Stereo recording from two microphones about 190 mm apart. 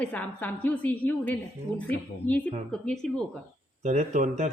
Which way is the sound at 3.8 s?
40° right (ahead or behind).